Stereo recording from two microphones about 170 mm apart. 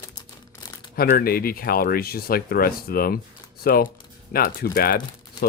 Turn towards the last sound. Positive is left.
turn(degrees=60)  # may be behind; listen again after turning